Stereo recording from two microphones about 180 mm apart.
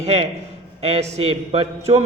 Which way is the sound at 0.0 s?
35° right (ahead or behind).